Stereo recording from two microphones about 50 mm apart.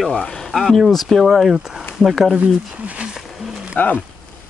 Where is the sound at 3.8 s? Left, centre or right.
Left.